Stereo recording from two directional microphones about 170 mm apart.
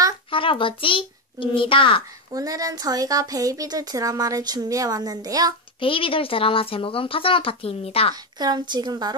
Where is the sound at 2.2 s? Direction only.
20° right (ahead or behind).